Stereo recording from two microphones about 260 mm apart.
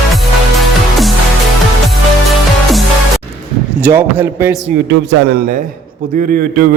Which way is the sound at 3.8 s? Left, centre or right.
Centre.